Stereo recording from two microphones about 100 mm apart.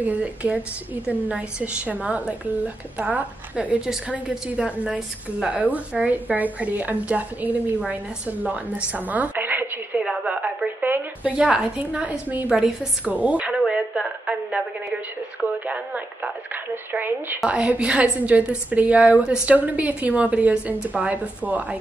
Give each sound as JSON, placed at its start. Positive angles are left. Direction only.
{"t": 0.0, "sound": "a woman's voice", "side_deg": -15}
{"t": 13.6, "sound": "a sound", "side_deg": -5}
{"t": 15.4, "sound": "a woman's voice", "side_deg": -15}